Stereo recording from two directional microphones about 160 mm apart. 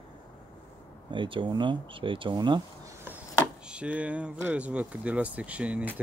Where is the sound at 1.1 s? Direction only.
30° right (ahead or behind).